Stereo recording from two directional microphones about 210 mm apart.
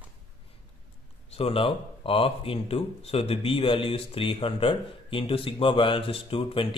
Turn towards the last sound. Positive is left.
turn(degrees=25)  # may be behind; listen again after turning